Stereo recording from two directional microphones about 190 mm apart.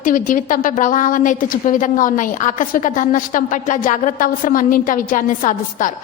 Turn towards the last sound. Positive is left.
turn(degrees=45)  # may be behind; listen again after turning